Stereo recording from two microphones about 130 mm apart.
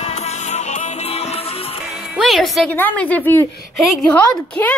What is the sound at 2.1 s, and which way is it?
Speech, centre (ahead or behind).